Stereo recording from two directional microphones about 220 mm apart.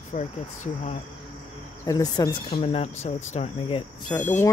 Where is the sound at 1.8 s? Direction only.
15° left (ahead or behind).